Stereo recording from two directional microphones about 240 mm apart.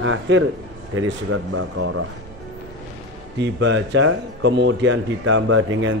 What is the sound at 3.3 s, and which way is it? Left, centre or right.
Speech, right.